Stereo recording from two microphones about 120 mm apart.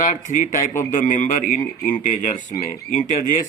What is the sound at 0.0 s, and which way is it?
Speech, 90° left.